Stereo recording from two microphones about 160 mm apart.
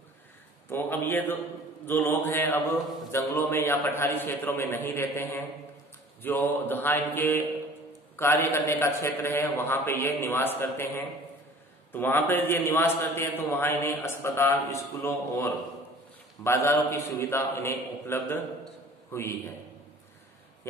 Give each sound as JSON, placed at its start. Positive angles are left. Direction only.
{"t": 0.7, "sound": "a man's voice", "side_deg": 15}